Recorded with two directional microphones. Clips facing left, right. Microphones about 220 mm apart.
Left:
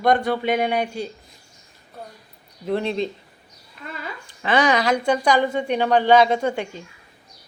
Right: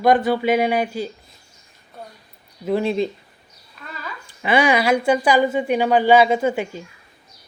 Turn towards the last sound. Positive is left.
turn(degrees=-5)  # may be behind; listen again after turning